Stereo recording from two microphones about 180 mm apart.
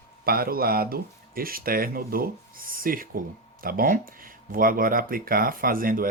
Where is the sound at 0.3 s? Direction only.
55° right (ahead or behind).